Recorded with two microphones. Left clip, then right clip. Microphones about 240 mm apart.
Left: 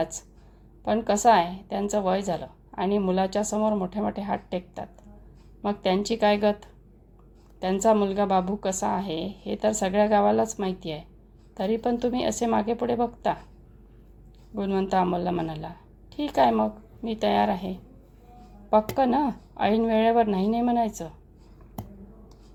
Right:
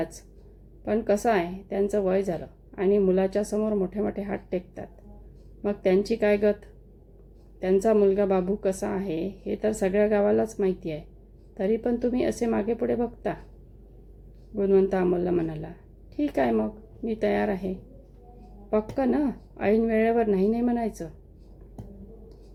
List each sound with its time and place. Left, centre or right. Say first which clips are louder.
0.9 s a woman's voice: left 4 dB; left
7.6 s a woman's voice: right 1 dB; left
14.5 s a woman's voice: right 3 dB; left